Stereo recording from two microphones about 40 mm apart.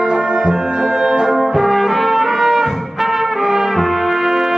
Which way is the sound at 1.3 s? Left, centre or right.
Centre.